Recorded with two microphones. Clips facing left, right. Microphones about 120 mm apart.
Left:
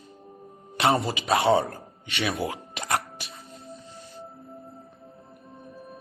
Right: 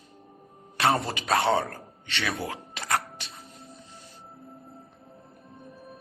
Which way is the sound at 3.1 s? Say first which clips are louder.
Left 2 dB; centre (ahead or behind).